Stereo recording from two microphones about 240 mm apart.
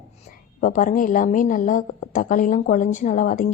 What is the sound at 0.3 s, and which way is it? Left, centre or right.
A woman's voice, left.